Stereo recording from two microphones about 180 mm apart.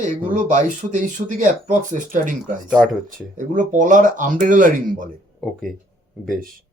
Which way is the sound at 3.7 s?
45° right (ahead or behind).